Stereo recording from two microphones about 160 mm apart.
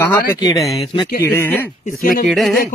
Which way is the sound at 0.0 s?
15° left (ahead or behind).